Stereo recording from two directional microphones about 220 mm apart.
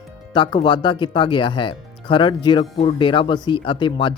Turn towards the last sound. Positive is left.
turn(degrees=20)  # may be behind; listen again after turning